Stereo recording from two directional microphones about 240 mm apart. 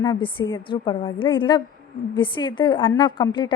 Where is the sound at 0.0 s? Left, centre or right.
Centre.